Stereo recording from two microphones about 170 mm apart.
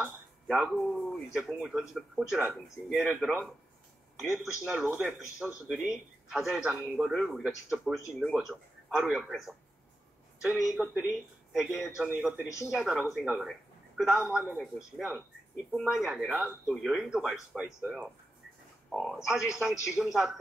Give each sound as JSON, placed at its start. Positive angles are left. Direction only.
{"t": 0.0, "sound": "speech", "side_deg": 0}
{"t": 10.8, "sound": "speech", "side_deg": -5}
{"t": 12.4, "sound": "speech", "side_deg": 20}
{"t": 12.7, "sound": "speech", "side_deg": -5}